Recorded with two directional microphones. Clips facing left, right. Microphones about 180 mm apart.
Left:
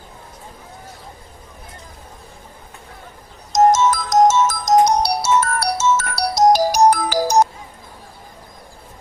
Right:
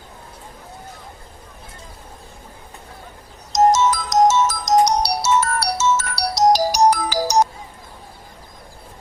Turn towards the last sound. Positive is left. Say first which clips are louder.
# left 2 dB
turn(degrees=50)  # may be behind; listen again after turning